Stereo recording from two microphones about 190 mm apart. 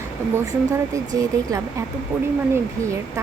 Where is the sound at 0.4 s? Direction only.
20° right (ahead or behind).